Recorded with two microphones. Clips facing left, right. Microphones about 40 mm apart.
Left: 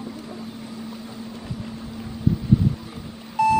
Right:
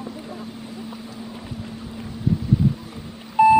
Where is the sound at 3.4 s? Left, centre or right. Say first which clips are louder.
Right 5 dB; right.